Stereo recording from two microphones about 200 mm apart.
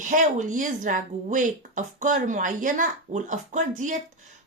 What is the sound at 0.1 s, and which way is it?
A woman's voice, 40° right (ahead or behind).